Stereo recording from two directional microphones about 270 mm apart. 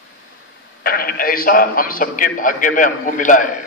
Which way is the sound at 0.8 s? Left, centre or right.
Left.